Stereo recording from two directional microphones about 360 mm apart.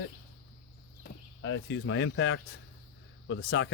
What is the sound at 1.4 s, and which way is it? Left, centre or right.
Speech, left.